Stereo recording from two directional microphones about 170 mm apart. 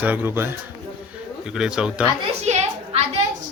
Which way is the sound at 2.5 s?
40° right (ahead or behind).